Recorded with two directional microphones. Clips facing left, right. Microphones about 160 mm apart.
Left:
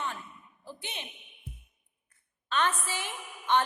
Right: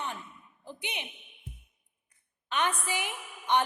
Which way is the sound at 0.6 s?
20° right (ahead or behind).